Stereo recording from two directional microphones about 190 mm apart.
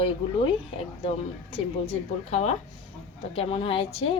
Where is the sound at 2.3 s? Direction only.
30° left (ahead or behind).